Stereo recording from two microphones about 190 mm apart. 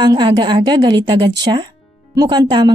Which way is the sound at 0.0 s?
25° right (ahead or behind).